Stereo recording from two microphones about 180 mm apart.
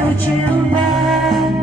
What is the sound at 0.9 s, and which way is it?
Music, centre (ahead or behind).